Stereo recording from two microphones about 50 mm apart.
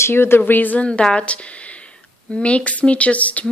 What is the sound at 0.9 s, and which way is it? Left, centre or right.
Speech, left.